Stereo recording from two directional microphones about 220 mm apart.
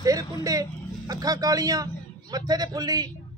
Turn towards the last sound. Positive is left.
turn(degrees=-15)  # may be behind; listen again after turning